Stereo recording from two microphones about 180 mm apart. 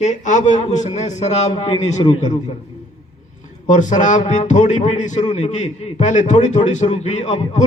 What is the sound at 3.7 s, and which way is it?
A man's voice, 45° left (ahead or behind).